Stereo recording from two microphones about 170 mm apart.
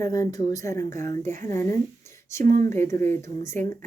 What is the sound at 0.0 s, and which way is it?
Speech, 20° left (ahead or behind).